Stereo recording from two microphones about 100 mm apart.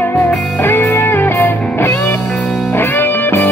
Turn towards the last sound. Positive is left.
turn(degrees=20)  # may be behind; listen again after turning